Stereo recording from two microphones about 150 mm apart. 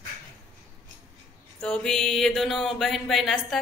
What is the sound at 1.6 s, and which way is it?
Mantra, 5° left (ahead or behind).